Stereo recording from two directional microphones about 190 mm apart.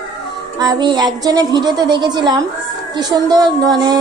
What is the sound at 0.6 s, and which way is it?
A woman's voice, 20° right (ahead or behind).